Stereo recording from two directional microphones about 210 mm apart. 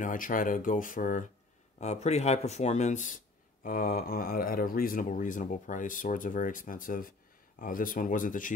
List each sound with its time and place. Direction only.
0.0 s speech: 40° left (ahead or behind)